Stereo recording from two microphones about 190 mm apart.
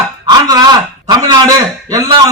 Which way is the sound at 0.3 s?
20° right (ahead or behind).